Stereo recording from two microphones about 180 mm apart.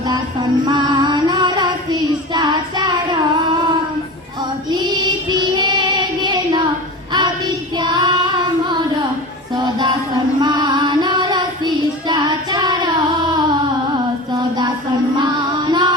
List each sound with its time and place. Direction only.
0.0 s music: 25° right (ahead or behind)
4.7 s child singing: 25° right (ahead or behind)
10.4 s child singing: 25° right (ahead or behind)
14.3 s a sound: 20° right (ahead or behind)
15.2 s music: 25° right (ahead or behind)